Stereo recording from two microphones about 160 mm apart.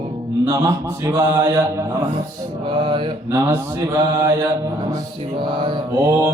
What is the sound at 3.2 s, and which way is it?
Mantra, 15° right (ahead or behind).